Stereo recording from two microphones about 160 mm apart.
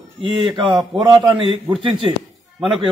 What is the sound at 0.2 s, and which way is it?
A man's voice, 30° right (ahead or behind).